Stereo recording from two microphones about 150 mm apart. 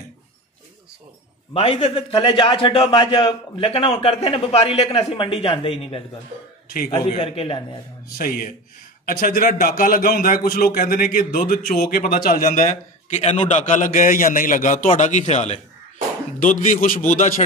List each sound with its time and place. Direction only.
1.5 s a man's voice: 40° left (ahead or behind)
7.1 s a man's voice: 40° left (ahead or behind)
8.2 s a man's voice: 70° left (ahead or behind)
12.4 s a man's voice: 55° left (ahead or behind)
16.3 s a man's voice: 60° left (ahead or behind)